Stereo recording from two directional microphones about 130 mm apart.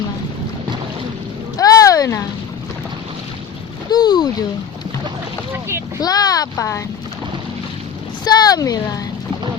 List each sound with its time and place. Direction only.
1.5 s vehicle: 25° left (ahead or behind)
3.8 s speech: 35° left (ahead or behind)
6.0 s speech: 30° left (ahead or behind)
8.2 s speech: 30° left (ahead or behind)